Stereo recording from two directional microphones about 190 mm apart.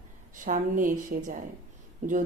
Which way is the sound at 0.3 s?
45° right (ahead or behind).